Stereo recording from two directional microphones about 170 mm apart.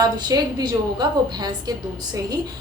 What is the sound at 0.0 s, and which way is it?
A woman's voice, 25° right (ahead or behind).